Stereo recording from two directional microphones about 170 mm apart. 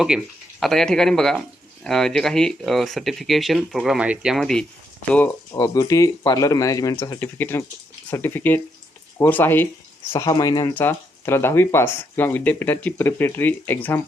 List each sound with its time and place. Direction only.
0.0 s speech: centre (ahead or behind)
5.5 s speech: 20° left (ahead or behind)
10.2 s speech: 25° left (ahead or behind)
10.8 s speech: 15° left (ahead or behind)